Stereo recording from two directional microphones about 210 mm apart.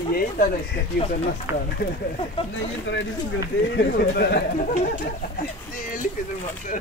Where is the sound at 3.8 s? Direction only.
50° left (ahead or behind).